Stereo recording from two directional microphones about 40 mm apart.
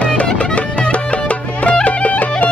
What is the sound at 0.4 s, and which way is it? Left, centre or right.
Music, left.